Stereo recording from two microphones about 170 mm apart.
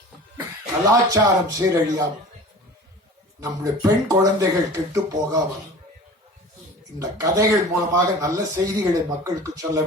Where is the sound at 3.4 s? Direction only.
20° right (ahead or behind).